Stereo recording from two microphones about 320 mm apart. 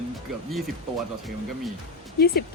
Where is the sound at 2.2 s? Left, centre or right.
Left.